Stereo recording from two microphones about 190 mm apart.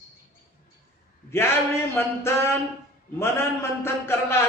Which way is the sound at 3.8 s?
15° left (ahead or behind).